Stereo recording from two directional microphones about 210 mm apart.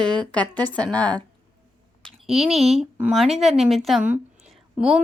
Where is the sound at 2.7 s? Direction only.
5° right (ahead or behind).